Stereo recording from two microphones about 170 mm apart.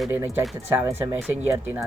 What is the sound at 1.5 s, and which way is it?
Speech, 15° right (ahead or behind).